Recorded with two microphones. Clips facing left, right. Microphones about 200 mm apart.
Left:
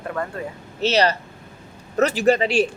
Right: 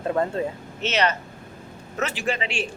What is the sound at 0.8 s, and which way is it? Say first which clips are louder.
Speech: left 5 dB; 35° left (ahead or behind).